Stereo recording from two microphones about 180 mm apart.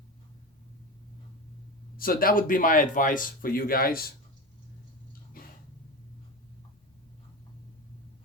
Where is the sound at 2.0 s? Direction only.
55° left (ahead or behind).